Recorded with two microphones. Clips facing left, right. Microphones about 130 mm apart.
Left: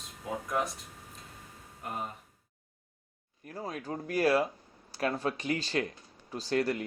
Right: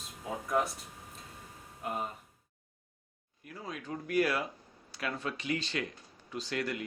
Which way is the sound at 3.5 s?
40° left (ahead or behind).